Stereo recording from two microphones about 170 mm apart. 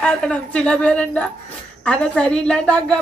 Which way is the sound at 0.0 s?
5° left (ahead or behind).